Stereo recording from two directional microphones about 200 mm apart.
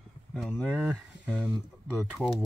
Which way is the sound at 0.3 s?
Centre (ahead or behind).